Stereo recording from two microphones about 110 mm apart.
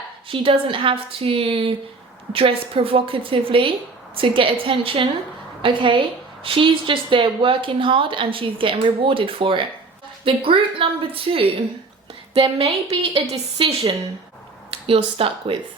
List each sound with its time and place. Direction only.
0.3 s a woman's voice: 55° right (ahead or behind)